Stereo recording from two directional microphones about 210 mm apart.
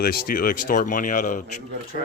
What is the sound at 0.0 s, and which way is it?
Speech, 45° left (ahead or behind).